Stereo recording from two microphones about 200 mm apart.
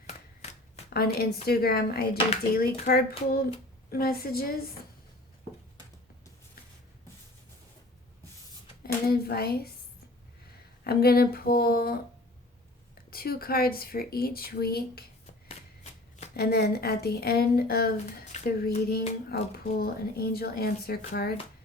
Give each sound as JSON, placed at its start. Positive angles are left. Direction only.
{"t": 0.9, "sound": "a woman's voice", "side_deg": 50}
{"t": 8.8, "sound": "speech", "side_deg": 50}
{"t": 10.8, "sound": "speech", "side_deg": 50}
{"t": 13.1, "sound": "speech", "side_deg": 50}
{"t": 16.3, "sound": "speech", "side_deg": 50}
{"t": 18.3, "sound": "a sound", "side_deg": 35}
{"t": 18.9, "sound": "speech", "side_deg": 50}